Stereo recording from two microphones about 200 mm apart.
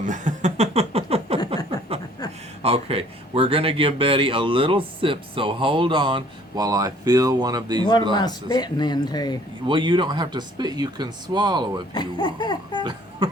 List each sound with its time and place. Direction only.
0.0 s chuckle: 40° right (ahead or behind)
2.6 s speech: 30° right (ahead or behind)
8.1 s speech: 20° left (ahead or behind)
9.6 s speech: 25° right (ahead or behind)
11.9 s speech: 20° left (ahead or behind)
12.8 s a sound: 20° right (ahead or behind)